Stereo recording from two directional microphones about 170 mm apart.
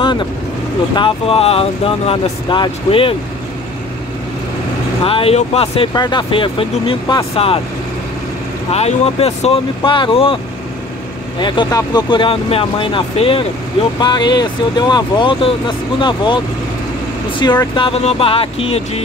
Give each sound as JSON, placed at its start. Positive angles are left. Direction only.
{"t": 0.0, "sound": "vehicle", "side_deg": 25}
{"t": 0.9, "sound": "speech", "side_deg": 30}
{"t": 5.0, "sound": "speech", "side_deg": 35}
{"t": 8.7, "sound": "speech", "side_deg": 35}
{"t": 17.4, "sound": "speech", "side_deg": 25}